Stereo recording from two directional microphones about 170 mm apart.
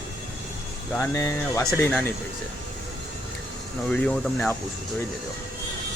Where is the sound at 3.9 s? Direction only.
5° left (ahead or behind).